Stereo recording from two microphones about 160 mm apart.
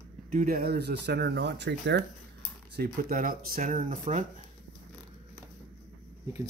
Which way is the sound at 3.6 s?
50° right (ahead or behind).